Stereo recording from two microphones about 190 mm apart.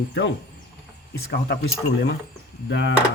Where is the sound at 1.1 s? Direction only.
60° left (ahead or behind).